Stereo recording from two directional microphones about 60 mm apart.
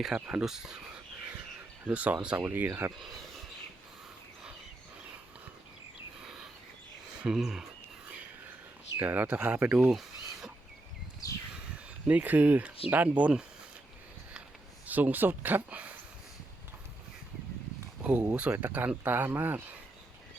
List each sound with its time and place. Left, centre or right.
0.1 s speech: centre
0.4 s speech: centre
1.9 s speech: right
6.2 s a sound: centre
7.2 s speech: centre
9.0 s speech: right
9.9 s a sound: centre
11.2 s bird: left
11.7 s speech: right
14.8 s speech: right
18.0 s speech: right